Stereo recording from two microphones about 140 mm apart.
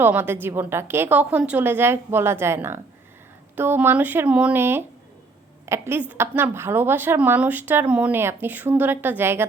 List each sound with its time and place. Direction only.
0.0 s a woman's voice: 15° right (ahead or behind)